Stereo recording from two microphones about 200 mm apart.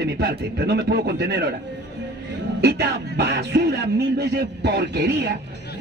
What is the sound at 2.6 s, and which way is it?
Speech, 55° right (ahead or behind).